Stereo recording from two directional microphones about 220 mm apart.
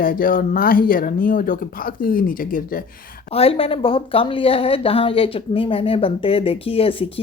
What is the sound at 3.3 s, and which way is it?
A woman's voice, 25° left (ahead or behind).